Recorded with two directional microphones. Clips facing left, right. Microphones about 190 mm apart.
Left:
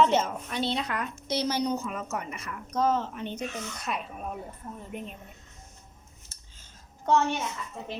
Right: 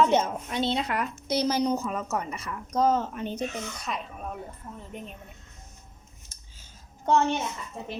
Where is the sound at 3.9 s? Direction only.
5° left (ahead or behind).